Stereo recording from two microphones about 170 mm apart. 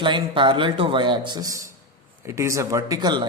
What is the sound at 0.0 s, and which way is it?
Speech, 30° right (ahead or behind).